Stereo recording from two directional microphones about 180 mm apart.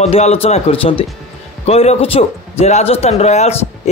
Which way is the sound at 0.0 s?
35° left (ahead or behind).